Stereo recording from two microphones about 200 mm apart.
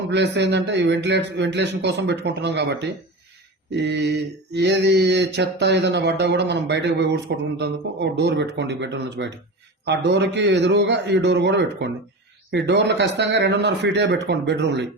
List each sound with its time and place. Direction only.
0.1 s mantra: 60° right (ahead or behind)